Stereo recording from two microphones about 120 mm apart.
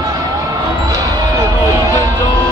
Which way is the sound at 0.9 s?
30° right (ahead or behind).